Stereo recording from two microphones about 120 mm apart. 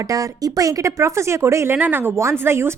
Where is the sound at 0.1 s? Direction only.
30° right (ahead or behind).